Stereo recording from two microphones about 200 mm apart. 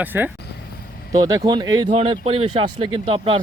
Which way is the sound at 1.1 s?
20° right (ahead or behind).